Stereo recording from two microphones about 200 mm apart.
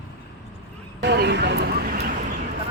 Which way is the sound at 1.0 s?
60° right (ahead or behind).